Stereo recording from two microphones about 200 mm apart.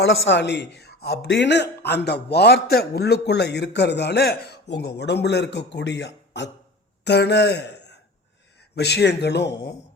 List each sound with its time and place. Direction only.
0.0 s a man's voice: 60° left (ahead or behind)